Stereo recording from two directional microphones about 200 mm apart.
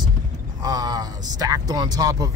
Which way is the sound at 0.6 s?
20° right (ahead or behind).